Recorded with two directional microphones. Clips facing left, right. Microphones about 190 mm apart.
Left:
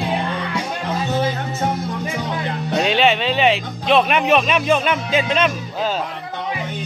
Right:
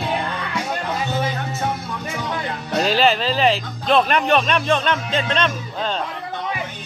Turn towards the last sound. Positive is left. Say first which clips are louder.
# left 3 dB
turn(degrees=5)  # may be behind; listen again after turning